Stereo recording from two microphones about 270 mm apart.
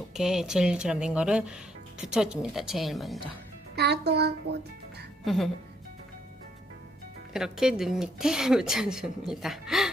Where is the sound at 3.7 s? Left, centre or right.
Right.